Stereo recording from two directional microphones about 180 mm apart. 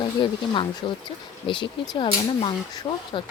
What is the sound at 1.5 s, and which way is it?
Speech, 25° left (ahead or behind).